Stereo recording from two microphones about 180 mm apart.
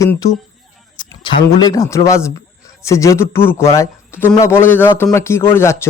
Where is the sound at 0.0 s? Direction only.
15° left (ahead or behind).